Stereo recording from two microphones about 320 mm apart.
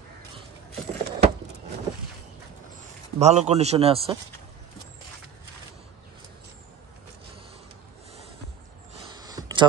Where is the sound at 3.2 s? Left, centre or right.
Right.